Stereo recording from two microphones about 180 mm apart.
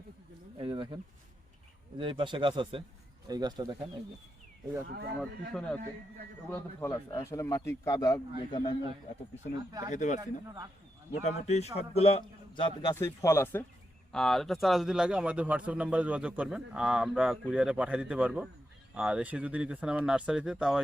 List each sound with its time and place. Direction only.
0.6 s a sound: 30° right (ahead or behind)
2.0 s speech: 25° right (ahead or behind)
5.2 s speech: 5° left (ahead or behind)
6.5 s speech: 15° left (ahead or behind)
9.9 s speech: 45° left (ahead or behind)
10.2 s speech: 20° right (ahead or behind)
11.1 s a man's voice: 40° left (ahead or behind); by 13.7 s 15° left (ahead or behind)
14.1 s speech: centre (ahead or behind)